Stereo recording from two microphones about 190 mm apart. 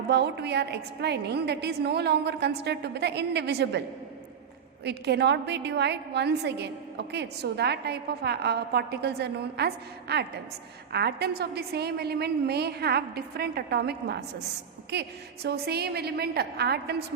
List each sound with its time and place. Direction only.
0.1 s a woman's voice: 60° right (ahead or behind)